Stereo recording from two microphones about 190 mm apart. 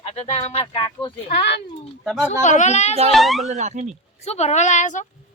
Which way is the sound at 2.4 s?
40° left (ahead or behind).